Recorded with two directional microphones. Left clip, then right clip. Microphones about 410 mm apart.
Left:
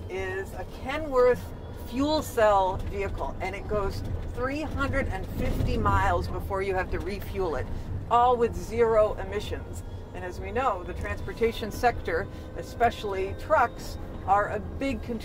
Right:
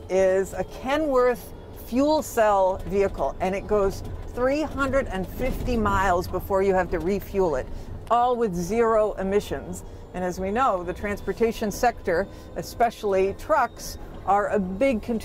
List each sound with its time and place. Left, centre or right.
0.1 s a man's voice: right
2.0 s speech: right
8.1 s a man's voice: right